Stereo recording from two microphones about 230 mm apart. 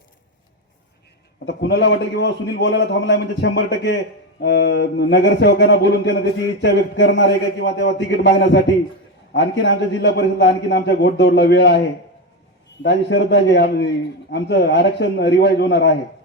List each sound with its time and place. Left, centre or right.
1.5 s a man's voice: left
12.8 s a man's voice: left